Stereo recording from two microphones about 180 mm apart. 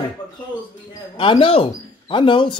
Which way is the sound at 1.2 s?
30° left (ahead or behind).